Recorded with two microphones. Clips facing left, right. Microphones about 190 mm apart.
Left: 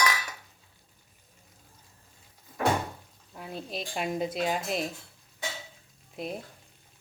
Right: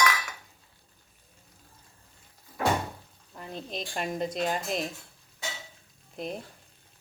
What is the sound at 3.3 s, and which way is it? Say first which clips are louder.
Speech: even; 5° left (ahead or behind).